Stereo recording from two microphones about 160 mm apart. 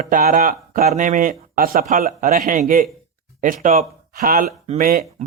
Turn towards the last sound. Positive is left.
turn(degrees=-60)  # may be behind; listen again after turning